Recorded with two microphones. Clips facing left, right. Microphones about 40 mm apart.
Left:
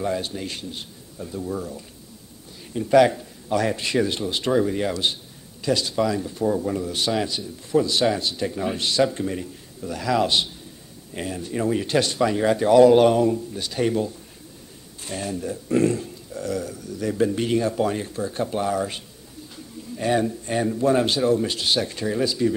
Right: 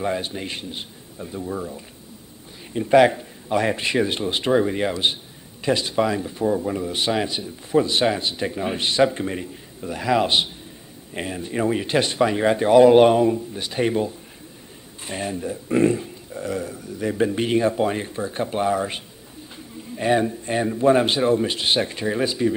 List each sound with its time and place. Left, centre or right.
0.0 s speech: right
6.5 s speech: centre
6.8 s speech: right